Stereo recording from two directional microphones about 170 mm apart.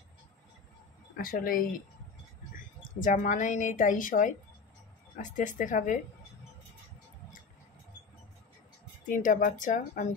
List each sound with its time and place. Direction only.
1.1 s speech: 60° left (ahead or behind)
3.0 s a woman's voice: 50° left (ahead or behind)
9.1 s a woman's voice: 50° left (ahead or behind)